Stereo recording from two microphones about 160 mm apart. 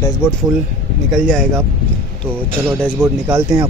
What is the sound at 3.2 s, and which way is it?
Speech, 25° right (ahead or behind).